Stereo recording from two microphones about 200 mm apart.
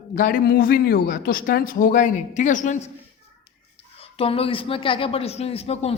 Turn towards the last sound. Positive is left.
turn(degrees=30)  # may be behind; listen again after turning